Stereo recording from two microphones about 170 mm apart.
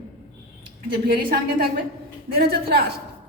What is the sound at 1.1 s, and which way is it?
A woman's voice, 60° right (ahead or behind).